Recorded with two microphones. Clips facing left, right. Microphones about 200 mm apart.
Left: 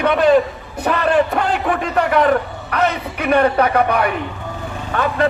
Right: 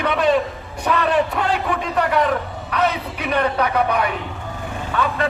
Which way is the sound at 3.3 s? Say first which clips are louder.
Left 5 dB; 55° left (ahead or behind).